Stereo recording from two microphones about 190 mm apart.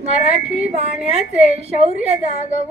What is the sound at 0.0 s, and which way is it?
A woman's voice, 35° right (ahead or behind).